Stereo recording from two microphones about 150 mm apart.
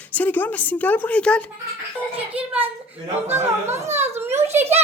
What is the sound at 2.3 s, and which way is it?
Speech, 10° right (ahead or behind).